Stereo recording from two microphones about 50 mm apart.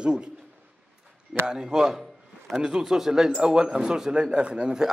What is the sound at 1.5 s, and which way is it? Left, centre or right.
Speech, centre.